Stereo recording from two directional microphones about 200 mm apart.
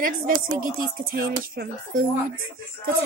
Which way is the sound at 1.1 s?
45° right (ahead or behind).